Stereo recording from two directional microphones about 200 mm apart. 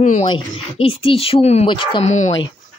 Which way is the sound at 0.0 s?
35° left (ahead or behind).